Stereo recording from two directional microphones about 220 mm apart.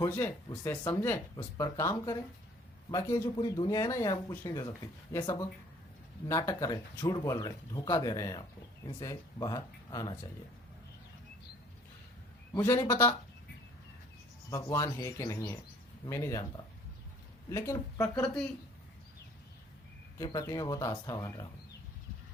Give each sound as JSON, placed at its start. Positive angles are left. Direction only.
{"t": 0.0, "sound": "speech", "side_deg": 10}
{"t": 12.5, "sound": "speech", "side_deg": 15}
{"t": 14.5, "sound": "speech", "side_deg": 15}
{"t": 17.5, "sound": "speech", "side_deg": 10}
{"t": 20.1, "sound": "speech", "side_deg": 15}